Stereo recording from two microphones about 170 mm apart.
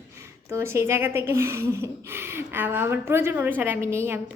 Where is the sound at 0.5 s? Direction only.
15° right (ahead or behind).